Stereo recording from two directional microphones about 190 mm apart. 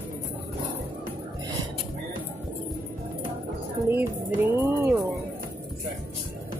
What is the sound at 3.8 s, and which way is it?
Music, 10° right (ahead or behind).